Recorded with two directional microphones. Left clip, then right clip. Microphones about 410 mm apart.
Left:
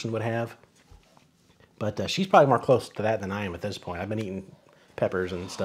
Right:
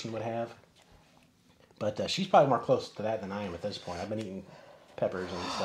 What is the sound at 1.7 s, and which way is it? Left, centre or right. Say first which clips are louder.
Speech: left 2 dB; left.